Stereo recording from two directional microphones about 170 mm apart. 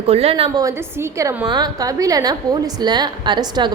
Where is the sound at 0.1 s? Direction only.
35° right (ahead or behind).